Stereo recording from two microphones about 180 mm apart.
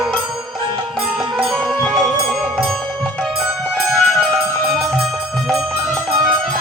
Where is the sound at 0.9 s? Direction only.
Centre (ahead or behind).